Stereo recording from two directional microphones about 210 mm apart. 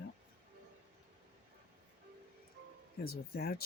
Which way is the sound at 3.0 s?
45° left (ahead or behind).